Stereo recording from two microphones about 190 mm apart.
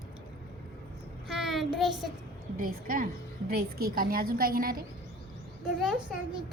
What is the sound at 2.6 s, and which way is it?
A woman's voice, 45° right (ahead or behind).